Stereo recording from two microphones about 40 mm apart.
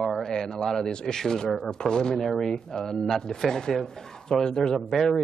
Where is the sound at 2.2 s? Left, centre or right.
Centre.